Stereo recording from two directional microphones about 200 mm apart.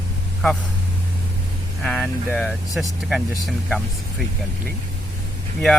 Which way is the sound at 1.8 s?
5° left (ahead or behind).